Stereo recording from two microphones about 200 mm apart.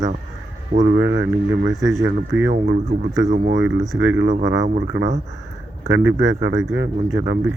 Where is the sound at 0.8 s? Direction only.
65° right (ahead or behind).